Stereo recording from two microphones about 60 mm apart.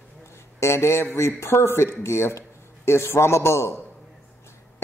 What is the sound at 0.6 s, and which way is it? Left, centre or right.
Speech, left.